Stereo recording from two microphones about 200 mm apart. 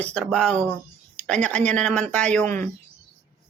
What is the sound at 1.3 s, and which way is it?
Speech, 5° left (ahead or behind).